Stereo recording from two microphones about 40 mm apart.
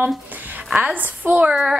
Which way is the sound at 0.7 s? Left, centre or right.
Right.